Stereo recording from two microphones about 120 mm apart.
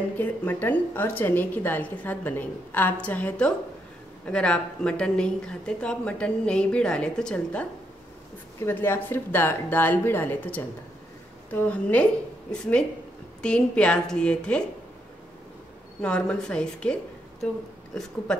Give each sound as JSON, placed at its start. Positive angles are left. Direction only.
{"t": 0.2, "sound": "a woman's voice", "side_deg": 15}
{"t": 8.5, "sound": "a woman's voice", "side_deg": 20}
{"t": 16.0, "sound": "a woman's voice", "side_deg": 10}
{"t": 17.9, "sound": "speech", "side_deg": 5}